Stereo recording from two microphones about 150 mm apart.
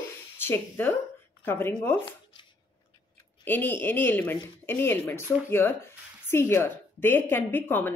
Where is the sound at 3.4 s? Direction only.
15° left (ahead or behind).